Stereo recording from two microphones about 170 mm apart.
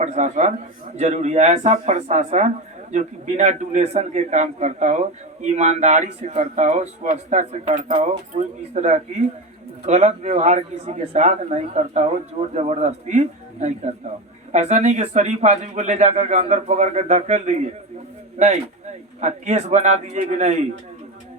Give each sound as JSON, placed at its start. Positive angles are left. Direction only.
{"t": 0.0, "sound": "a man's voice", "side_deg": -45}